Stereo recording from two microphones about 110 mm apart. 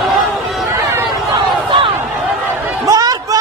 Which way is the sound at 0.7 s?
25° right (ahead or behind).